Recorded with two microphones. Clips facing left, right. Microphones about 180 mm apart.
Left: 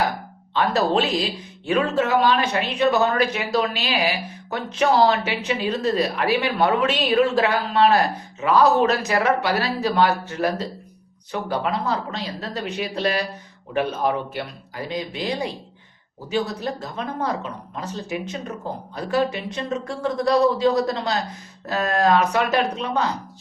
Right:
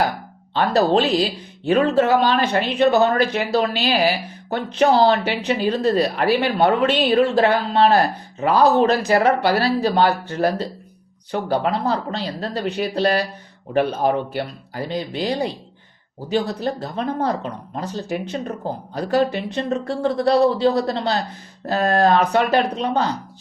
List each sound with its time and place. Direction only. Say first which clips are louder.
0.5 s speech: right 3 dB; 35° right (ahead or behind)